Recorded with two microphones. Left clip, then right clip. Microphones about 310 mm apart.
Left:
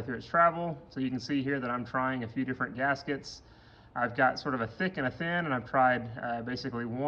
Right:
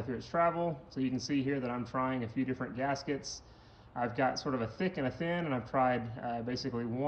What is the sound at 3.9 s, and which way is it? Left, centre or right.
Speech, left.